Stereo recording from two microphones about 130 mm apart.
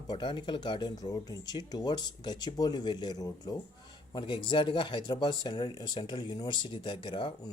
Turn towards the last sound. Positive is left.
turn(degrees=40)  # may be behind; listen again after turning